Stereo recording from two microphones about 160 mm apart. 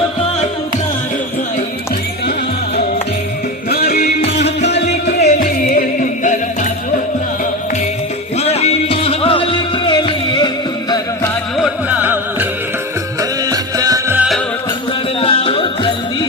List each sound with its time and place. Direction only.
3.7 s music: 75° left (ahead or behind); by 6.7 s 55° left (ahead or behind)
8.4 s music: 40° left (ahead or behind); by 11.3 s 25° left (ahead or behind)
11.5 s music: 5° right (ahead or behind)
13.5 s music: 25° right (ahead or behind)
14.2 s music: centre (ahead or behind)
15.2 s music: 35° left (ahead or behind)